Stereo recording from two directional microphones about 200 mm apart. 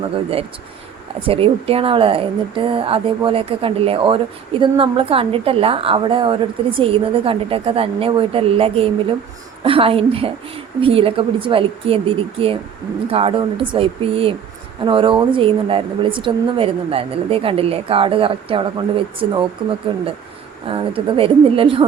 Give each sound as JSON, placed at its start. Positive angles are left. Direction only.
{"t": 1.3, "sound": "a woman's voice", "side_deg": -30}